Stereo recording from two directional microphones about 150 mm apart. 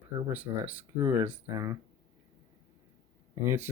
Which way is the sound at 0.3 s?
10° right (ahead or behind).